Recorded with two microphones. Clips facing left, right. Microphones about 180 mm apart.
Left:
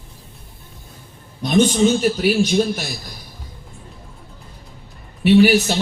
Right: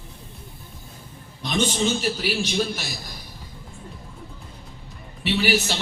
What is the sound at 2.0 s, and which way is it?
Speech, 50° left (ahead or behind).